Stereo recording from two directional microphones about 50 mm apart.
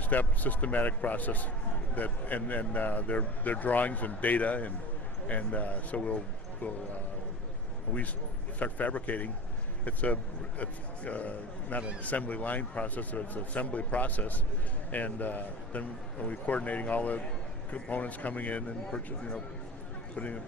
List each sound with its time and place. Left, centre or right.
0.0 s a man's voice: left
7.9 s a man's voice: left
18.9 s speech: centre
20.1 s a man's voice: left